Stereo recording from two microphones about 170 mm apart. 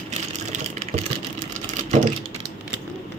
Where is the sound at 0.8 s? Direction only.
40° right (ahead or behind).